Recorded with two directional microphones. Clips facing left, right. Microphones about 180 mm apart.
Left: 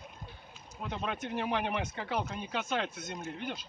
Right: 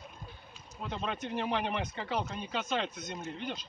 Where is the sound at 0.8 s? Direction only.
10° left (ahead or behind).